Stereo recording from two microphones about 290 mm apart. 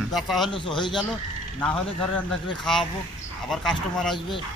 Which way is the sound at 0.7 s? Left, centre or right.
Centre.